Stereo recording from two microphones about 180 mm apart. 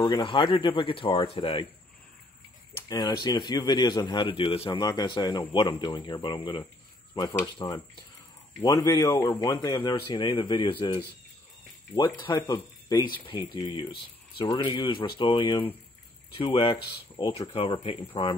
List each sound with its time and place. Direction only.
0.0 s a man's voice: 25° left (ahead or behind)
2.9 s a man's voice: 25° left (ahead or behind)
12.2 s a man's voice: 20° left (ahead or behind)